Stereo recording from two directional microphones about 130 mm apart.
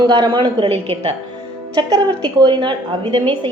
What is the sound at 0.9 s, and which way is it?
Speech, 55° right (ahead or behind).